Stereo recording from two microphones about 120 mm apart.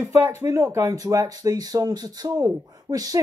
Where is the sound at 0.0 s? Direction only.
20° right (ahead or behind).